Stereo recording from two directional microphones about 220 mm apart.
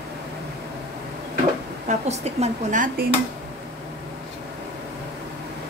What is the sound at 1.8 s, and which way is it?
Speech, 30° right (ahead or behind).